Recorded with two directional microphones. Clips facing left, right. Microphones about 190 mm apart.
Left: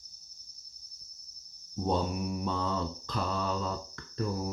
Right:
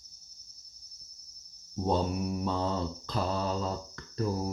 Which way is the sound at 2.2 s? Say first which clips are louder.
Right 2 dB; 35° right (ahead or behind).